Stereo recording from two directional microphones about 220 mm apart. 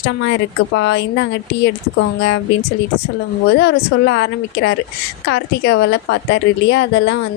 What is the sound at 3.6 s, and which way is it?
A woman's voice, 50° left (ahead or behind).